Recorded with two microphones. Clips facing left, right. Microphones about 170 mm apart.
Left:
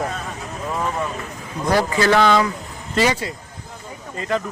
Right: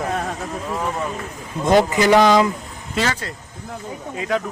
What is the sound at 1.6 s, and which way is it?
Speech, 20° right (ahead or behind).